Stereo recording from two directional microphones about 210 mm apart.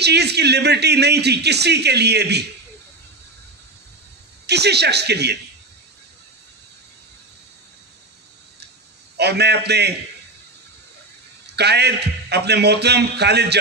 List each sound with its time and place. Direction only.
0.0 s speech: 50° right (ahead or behind)
4.5 s speech: 50° right (ahead or behind)
9.1 s speech: 50° right (ahead or behind)
11.5 s speech: 50° right (ahead or behind)